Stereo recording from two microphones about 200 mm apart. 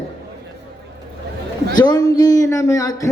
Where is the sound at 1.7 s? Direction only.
20° left (ahead or behind).